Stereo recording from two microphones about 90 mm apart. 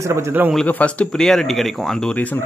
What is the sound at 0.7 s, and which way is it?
Speech, 15° left (ahead or behind).